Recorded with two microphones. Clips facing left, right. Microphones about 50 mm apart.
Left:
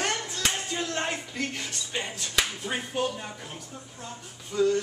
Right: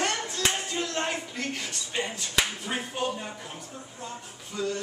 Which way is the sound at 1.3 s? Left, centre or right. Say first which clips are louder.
Left 1 dB; centre.